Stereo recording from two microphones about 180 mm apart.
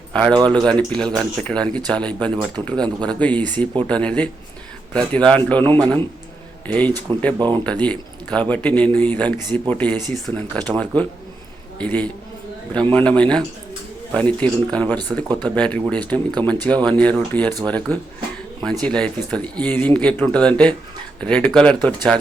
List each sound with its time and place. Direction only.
0.1 s speech: 5° left (ahead or behind)
5.6 s a man's voice: 25° right (ahead or behind)
6.7 s speech: 10° left (ahead or behind)